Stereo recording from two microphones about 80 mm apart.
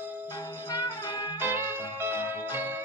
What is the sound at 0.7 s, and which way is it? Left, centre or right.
Music, left.